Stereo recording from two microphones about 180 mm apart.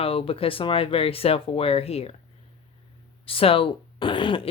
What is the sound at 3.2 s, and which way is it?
Speech, 30° left (ahead or behind).